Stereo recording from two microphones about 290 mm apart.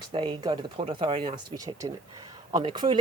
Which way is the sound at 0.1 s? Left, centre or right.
Centre.